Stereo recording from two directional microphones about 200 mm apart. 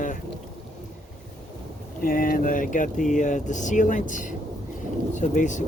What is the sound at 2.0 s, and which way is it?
Speech, 45° left (ahead or behind).